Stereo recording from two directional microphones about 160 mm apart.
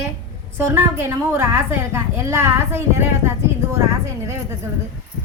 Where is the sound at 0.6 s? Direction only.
15° right (ahead or behind).